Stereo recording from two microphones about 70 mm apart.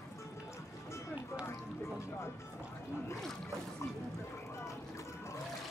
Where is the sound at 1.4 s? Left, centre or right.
Left.